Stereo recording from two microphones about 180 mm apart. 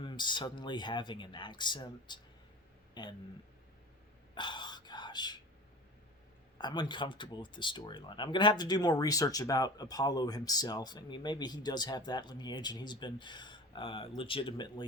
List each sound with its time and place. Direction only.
0.0 s speech: 25° left (ahead or behind)
4.4 s whispering: 25° left (ahead or behind)
6.6 s speech: 25° left (ahead or behind)